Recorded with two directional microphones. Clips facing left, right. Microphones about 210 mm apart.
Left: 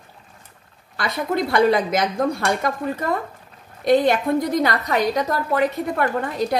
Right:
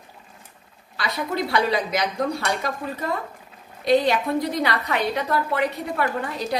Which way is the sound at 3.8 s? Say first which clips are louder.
Left 3 dB; 50° left (ahead or behind).